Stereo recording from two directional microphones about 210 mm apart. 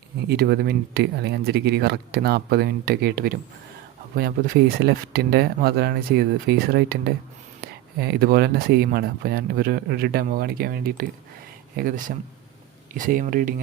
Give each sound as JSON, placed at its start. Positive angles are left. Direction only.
{"t": 0.3, "sound": "speech", "side_deg": -50}
{"t": 4.8, "sound": "speech", "side_deg": -50}